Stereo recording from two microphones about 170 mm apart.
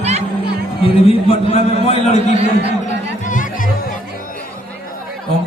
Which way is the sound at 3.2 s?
50° left (ahead or behind).